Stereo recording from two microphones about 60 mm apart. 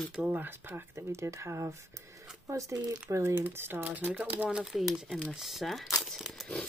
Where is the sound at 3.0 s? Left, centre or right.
Right.